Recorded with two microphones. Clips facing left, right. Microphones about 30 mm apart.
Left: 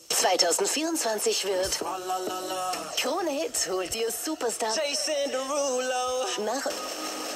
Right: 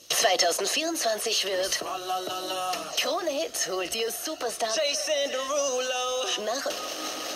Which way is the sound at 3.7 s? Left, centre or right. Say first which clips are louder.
Even; right.